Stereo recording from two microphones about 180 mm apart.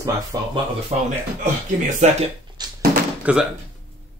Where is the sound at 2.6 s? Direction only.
25° right (ahead or behind).